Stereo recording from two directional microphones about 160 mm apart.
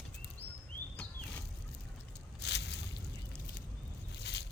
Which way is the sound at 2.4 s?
90° left.